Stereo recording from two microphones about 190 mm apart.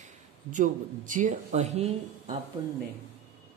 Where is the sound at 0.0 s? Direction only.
40° right (ahead or behind).